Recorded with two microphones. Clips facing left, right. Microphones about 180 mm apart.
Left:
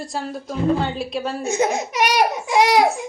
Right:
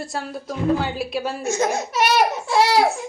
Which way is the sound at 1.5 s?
15° left (ahead or behind).